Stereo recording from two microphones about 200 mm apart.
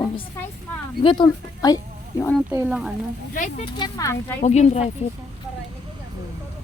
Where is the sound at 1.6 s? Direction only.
20° left (ahead or behind).